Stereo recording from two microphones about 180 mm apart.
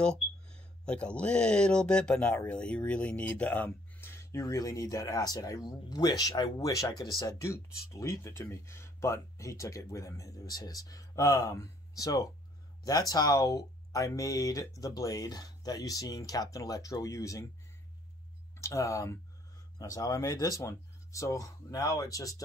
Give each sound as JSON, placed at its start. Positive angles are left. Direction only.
{"t": 0.0, "sound": "speech", "side_deg": 5}
{"t": 18.6, "sound": "speech", "side_deg": 15}